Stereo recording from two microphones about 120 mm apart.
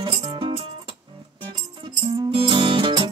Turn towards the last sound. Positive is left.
turn(degrees=-45)  # may be behind; listen again after turning